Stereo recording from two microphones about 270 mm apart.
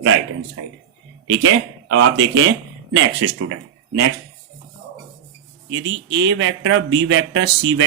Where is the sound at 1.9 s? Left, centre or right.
Right.